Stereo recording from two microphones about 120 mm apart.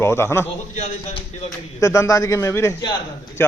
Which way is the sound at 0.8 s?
60° left (ahead or behind).